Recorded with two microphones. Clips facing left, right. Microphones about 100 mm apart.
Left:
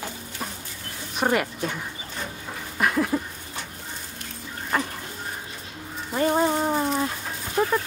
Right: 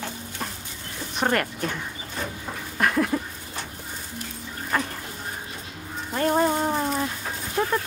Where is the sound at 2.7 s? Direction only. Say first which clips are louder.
Even; centre (ahead or behind).